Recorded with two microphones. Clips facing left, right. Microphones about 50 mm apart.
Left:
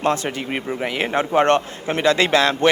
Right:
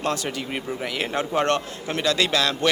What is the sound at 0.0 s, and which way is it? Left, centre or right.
A man's voice, left.